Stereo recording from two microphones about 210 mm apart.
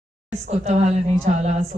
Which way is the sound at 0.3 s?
30° right (ahead or behind).